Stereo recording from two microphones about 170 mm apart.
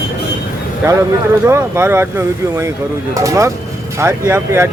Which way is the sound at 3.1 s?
20° right (ahead or behind).